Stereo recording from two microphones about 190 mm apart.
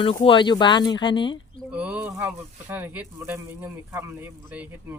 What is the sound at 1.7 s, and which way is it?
Speech, 5° right (ahead or behind).